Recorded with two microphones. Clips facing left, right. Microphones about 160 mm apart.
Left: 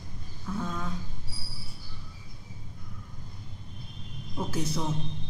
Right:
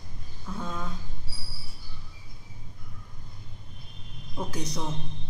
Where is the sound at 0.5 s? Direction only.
5° right (ahead or behind).